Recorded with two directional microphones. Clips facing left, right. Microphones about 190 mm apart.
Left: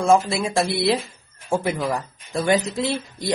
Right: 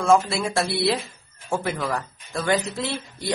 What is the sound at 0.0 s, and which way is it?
Speech, 20° left (ahead or behind).